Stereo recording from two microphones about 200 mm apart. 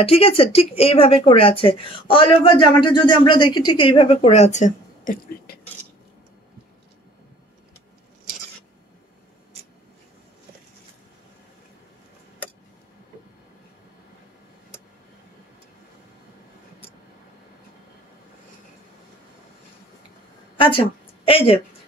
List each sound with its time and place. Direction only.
0.0 s speech: 30° left (ahead or behind)
20.5 s a sound: 25° left (ahead or behind)
21.3 s speech: 30° left (ahead or behind)